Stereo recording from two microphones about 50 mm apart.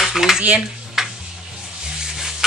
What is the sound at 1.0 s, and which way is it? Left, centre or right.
Tick-tock, centre.